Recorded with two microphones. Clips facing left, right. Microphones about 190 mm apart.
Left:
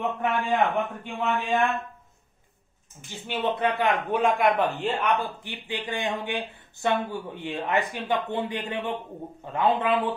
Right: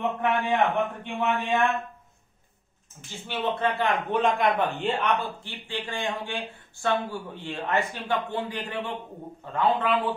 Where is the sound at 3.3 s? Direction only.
15° left (ahead or behind).